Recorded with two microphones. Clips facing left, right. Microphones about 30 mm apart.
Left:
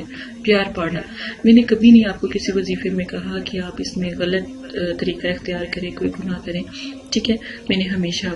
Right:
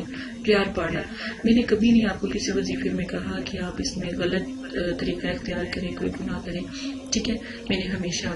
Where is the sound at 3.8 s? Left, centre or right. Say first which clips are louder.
Left 5 dB; left.